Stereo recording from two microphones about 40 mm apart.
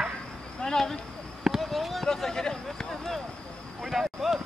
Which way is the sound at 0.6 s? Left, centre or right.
Centre.